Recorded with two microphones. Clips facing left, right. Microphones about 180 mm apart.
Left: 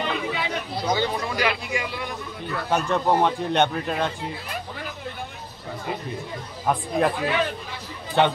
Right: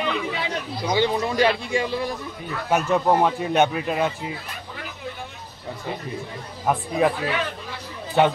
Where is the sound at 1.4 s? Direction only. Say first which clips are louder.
Right 6 dB; 30° right (ahead or behind).